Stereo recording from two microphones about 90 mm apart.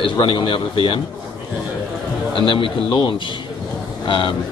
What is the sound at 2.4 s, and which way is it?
Speech, 65° left (ahead or behind).